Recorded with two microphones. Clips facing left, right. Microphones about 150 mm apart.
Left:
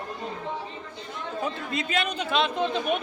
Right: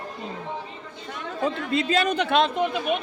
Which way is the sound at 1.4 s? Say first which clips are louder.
Right 5 dB; 90° right.